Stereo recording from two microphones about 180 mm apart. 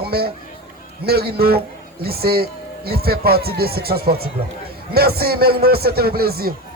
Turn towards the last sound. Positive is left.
turn(degrees=-60)  # may be behind; listen again after turning